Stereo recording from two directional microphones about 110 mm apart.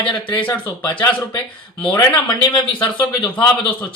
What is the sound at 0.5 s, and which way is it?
Speech, 15° left (ahead or behind).